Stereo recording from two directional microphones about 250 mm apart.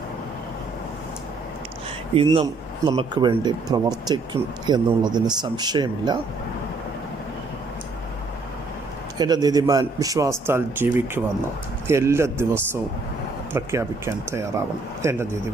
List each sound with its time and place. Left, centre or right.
2.1 s speech: centre
9.1 s speech: centre